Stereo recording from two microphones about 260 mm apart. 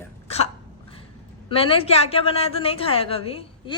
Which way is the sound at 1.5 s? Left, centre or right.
Left.